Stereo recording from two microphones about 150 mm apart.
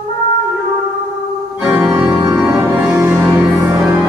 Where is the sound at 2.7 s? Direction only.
5° right (ahead or behind).